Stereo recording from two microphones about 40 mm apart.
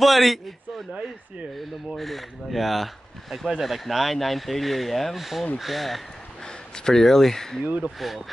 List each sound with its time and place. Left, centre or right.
0.0 s a man's voice: centre
2.0 s speech: centre
6.8 s speech: centre
7.6 s speech: right